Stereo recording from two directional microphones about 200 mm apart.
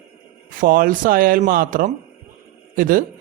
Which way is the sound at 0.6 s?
45° right (ahead or behind).